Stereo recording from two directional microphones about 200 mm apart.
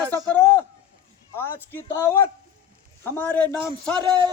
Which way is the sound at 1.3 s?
10° left (ahead or behind).